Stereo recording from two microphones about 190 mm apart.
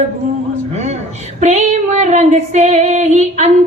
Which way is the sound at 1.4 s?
35° right (ahead or behind).